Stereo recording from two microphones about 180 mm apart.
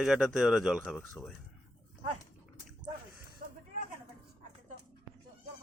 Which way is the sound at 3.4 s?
50° right (ahead or behind).